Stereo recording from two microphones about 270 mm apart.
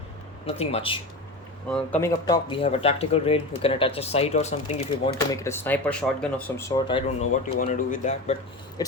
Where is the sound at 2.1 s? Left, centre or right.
Centre.